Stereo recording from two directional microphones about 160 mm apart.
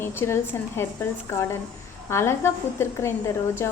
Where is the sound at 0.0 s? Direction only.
15° left (ahead or behind).